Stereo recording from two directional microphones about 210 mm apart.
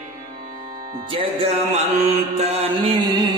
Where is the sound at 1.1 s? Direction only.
25° right (ahead or behind).